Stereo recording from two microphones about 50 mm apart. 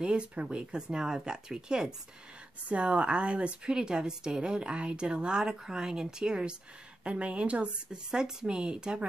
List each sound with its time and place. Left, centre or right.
0.0 s a woman's voice: right